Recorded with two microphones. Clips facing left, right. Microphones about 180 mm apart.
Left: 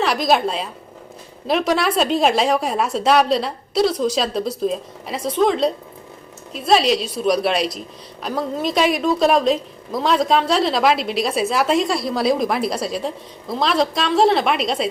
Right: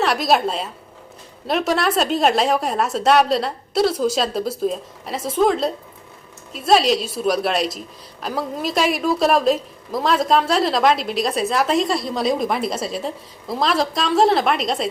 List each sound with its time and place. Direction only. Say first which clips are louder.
0.0 s a woman's voice: even; centre (ahead or behind)